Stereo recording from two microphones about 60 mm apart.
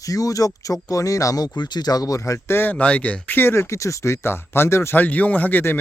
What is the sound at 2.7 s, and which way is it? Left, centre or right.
Speech, left.